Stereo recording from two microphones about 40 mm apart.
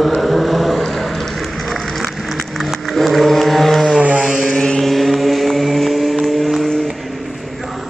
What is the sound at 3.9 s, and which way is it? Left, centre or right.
Vehicle, right.